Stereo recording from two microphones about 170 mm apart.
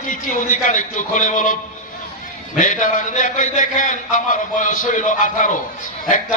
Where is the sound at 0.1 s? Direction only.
50° left (ahead or behind).